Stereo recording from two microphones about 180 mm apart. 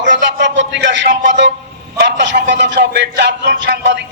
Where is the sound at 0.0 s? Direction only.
85° right.